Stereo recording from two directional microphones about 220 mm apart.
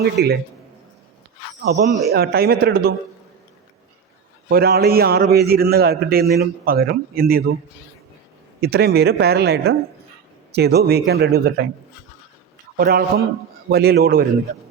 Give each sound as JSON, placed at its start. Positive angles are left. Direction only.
{"t": 0.0, "sound": "a man's voice", "side_deg": -45}
{"t": 1.7, "sound": "a man's voice", "side_deg": -45}
{"t": 4.4, "sound": "a man's voice", "side_deg": -45}
{"t": 8.6, "sound": "a man's voice", "side_deg": -45}
{"t": 12.7, "sound": "a man's voice", "side_deg": -45}